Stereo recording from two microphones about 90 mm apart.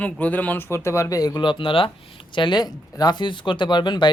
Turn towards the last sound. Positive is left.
turn(degrees=60)  # may be behind; listen again after turning